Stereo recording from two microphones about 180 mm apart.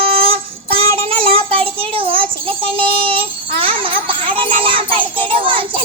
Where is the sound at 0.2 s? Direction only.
30° right (ahead or behind).